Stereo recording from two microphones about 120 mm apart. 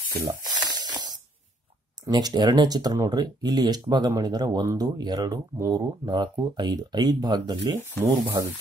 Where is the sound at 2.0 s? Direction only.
35° right (ahead or behind).